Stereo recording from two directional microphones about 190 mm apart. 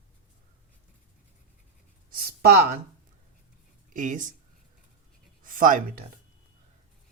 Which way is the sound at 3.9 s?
40° right (ahead or behind).